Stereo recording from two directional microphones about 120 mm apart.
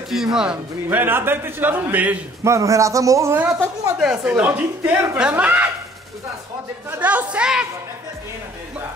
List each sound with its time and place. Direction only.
0.1 s speech: 5° right (ahead or behind)
0.8 s a woman's voice: 15° right (ahead or behind)
2.4 s a man's voice: 25° right (ahead or behind)
4.0 s a woman's voice: 10° right (ahead or behind)
6.9 s a woman's voice: 15° right (ahead or behind)